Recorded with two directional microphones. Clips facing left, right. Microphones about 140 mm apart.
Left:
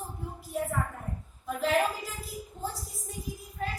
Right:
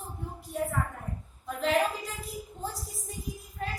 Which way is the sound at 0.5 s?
Centre (ahead or behind).